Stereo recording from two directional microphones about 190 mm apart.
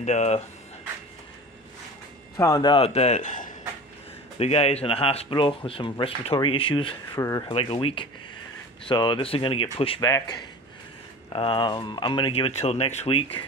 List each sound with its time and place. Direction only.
0.0 s a man's voice: 35° left (ahead or behind)
2.3 s a man's voice: 20° left (ahead or behind)